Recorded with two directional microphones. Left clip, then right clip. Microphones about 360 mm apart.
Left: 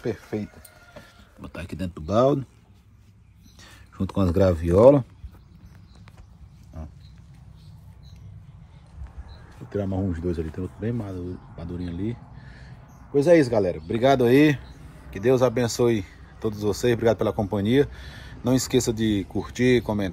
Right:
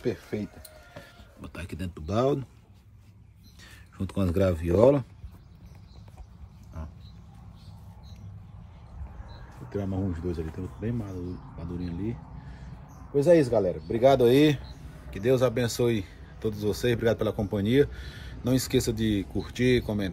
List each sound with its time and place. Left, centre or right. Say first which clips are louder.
0.0 s speech: left 2 dB; centre
3.6 s speech: left 6 dB; centre
9.7 s speech: left 5 dB; centre
13.1 s speech: left 3 dB; left